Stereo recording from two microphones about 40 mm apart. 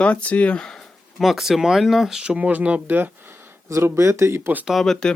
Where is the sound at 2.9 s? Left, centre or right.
Right.